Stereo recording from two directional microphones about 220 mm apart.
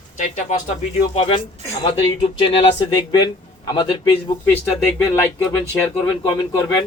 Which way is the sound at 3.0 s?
20° left (ahead or behind).